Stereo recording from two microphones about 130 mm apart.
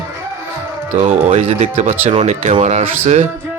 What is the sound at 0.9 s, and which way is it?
Speech, 60° right (ahead or behind).